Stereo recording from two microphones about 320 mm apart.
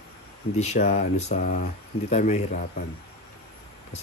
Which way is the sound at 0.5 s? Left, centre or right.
Left.